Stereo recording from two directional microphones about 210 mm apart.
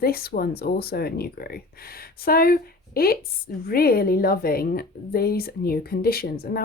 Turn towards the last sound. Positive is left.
turn(degrees=45)  # may be behind; listen again after turning